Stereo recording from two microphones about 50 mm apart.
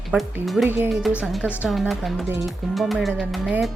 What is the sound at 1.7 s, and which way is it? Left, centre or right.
Speech, centre.